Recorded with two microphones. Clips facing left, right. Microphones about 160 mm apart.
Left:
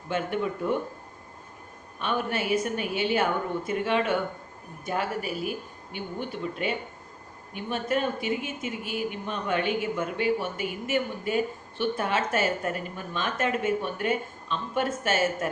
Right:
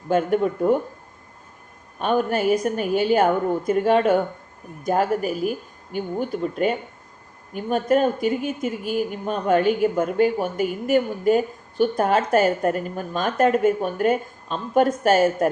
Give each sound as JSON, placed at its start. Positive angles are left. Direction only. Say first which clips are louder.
{"t": 0.1, "sound": "speech", "louder": "right 8 dB", "side_deg": -45}
{"t": 2.0, "sound": "speech", "louder": "right 8 dB", "side_deg": -45}